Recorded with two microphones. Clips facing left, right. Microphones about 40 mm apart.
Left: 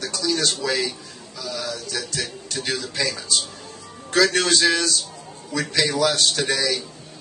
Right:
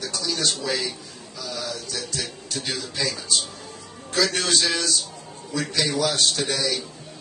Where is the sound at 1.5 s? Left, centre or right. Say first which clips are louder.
Left 2 dB; left.